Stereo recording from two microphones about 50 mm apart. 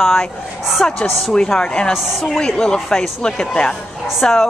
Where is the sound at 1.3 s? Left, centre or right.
Centre.